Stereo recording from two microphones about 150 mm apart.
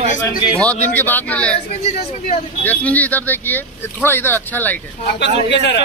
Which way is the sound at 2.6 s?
10° left (ahead or behind).